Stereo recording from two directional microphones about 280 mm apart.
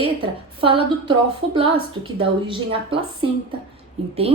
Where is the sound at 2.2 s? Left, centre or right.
Centre.